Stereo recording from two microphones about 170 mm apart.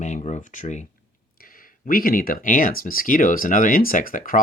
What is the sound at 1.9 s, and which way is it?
Speech, 60° left (ahead or behind).